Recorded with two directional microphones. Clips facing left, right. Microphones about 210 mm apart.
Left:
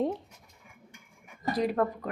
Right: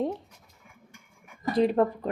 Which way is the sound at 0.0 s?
Centre (ahead or behind).